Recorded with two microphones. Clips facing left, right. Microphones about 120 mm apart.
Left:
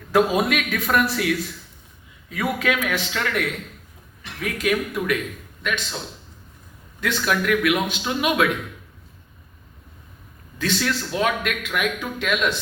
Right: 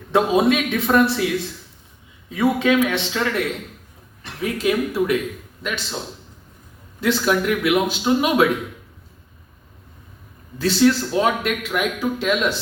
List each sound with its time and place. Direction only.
0.1 s a man's voice: 25° right (ahead or behind)
2.3 s a man's voice: 25° right (ahead or behind)
7.0 s a man's voice: 30° right (ahead or behind)
10.6 s a man's voice: 30° right (ahead or behind)